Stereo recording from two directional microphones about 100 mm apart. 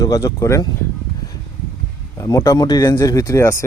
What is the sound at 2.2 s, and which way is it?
Speech, 30° left (ahead or behind).